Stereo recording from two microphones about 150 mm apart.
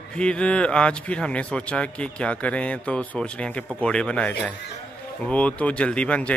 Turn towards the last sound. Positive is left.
turn(degrees=5)  # may be behind; listen again after turning